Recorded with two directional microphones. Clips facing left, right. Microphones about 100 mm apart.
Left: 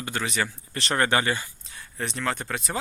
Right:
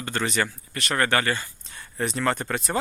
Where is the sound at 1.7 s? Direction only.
Centre (ahead or behind).